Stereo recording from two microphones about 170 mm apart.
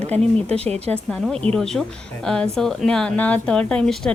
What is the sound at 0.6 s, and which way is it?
Speech, 40° right (ahead or behind).